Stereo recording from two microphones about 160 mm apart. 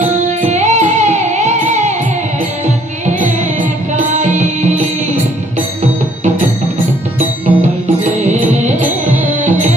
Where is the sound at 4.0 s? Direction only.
50° right (ahead or behind).